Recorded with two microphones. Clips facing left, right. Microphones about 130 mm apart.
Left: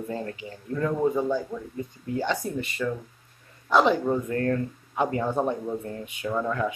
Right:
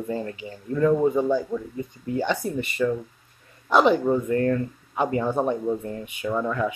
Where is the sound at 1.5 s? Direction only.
10° right (ahead or behind).